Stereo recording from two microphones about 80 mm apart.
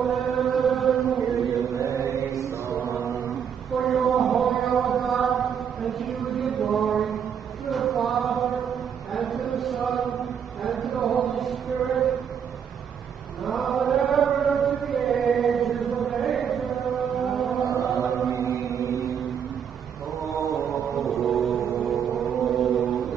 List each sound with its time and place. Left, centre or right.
0.0 s chant: centre
1.6 s chant: right
2.4 s mantra: right
3.3 s a sound: centre
7.7 s chant: centre
10.6 s a sound: centre
11.2 s chant: centre
13.5 s chant: centre
20.9 s a sound: centre